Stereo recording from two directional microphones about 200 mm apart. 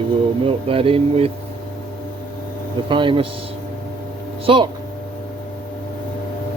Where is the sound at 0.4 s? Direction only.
30° right (ahead or behind).